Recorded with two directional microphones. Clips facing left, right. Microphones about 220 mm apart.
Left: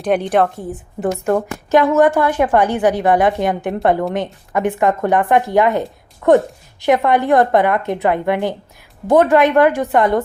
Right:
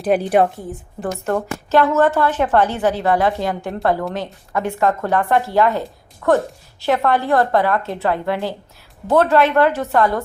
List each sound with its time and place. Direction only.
0.0 s a woman's voice: 5° right (ahead or behind)
0.7 s a woman's voice: 15° left (ahead or behind)